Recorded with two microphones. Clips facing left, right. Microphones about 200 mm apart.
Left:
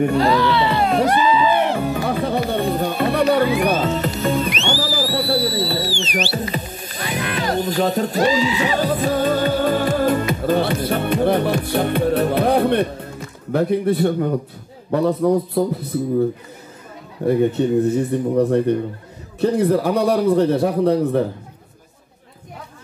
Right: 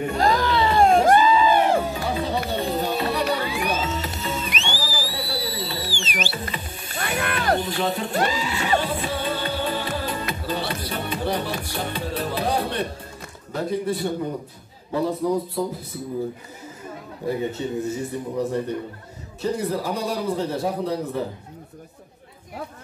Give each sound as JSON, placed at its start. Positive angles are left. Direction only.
{"t": 0.2, "sound": "music", "side_deg": -45}
{"t": 1.9, "sound": "music", "side_deg": 55}
{"t": 7.0, "sound": "music", "side_deg": -50}
{"t": 7.5, "sound": "speech", "side_deg": 40}
{"t": 8.2, "sound": "neigh", "side_deg": -55}
{"t": 8.7, "sound": "music", "side_deg": 40}
{"t": 13.5, "sound": "a man's voice", "side_deg": 60}
{"t": 17.3, "sound": "a man's voice", "side_deg": 60}